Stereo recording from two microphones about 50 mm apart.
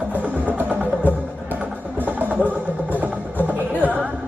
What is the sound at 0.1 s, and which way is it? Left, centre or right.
Vehicle, right.